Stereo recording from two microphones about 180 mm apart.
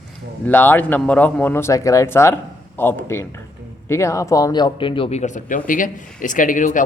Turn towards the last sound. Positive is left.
turn(degrees=45)  # may be behind; listen again after turning